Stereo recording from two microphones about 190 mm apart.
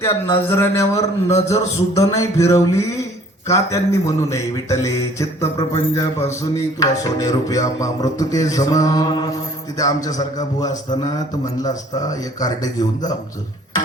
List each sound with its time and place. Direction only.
0.0 s a man's voice: 15° left (ahead or behind)